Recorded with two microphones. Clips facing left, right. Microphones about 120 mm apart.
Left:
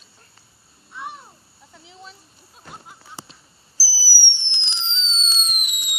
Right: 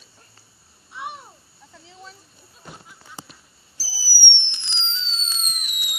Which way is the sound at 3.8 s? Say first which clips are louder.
Left 1 dB; 35° left (ahead or behind).